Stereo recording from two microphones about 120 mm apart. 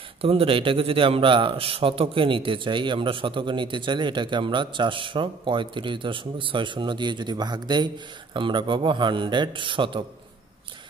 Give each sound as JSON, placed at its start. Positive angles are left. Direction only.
{"t": 0.2, "sound": "a man's voice", "side_deg": -50}